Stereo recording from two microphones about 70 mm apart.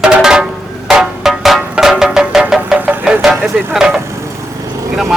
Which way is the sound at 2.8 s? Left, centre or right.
Right.